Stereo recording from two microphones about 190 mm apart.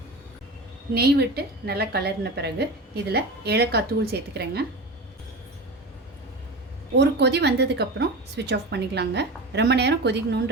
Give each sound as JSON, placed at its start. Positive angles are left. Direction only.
{"t": 0.9, "sound": "a woman's voice", "side_deg": -60}
{"t": 6.9, "sound": "a woman's voice", "side_deg": -65}